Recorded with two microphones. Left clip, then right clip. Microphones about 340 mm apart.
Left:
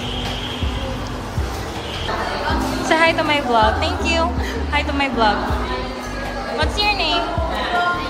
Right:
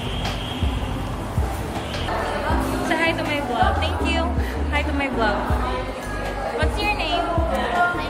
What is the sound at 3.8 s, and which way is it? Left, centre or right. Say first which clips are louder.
A woman's voice: left 4 dB; centre.